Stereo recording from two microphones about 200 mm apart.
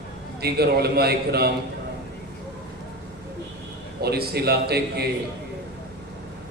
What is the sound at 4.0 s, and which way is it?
A man's voice, 50° right (ahead or behind).